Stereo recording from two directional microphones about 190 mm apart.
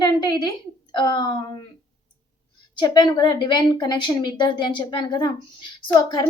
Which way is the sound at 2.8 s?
25° left (ahead or behind).